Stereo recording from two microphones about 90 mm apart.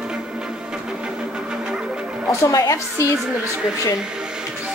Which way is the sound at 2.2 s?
35° left (ahead or behind).